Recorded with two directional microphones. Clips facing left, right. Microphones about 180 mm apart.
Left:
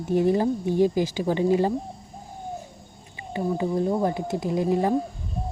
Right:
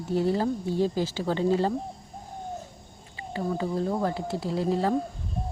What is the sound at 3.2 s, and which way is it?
Speech, 15° left (ahead or behind).